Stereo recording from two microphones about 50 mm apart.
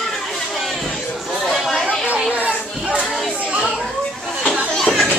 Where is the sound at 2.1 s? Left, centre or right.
Right.